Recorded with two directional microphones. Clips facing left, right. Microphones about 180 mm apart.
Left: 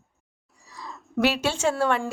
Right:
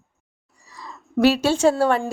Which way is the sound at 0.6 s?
Centre (ahead or behind).